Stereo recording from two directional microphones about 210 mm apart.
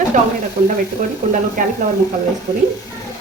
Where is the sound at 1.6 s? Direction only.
40° right (ahead or behind).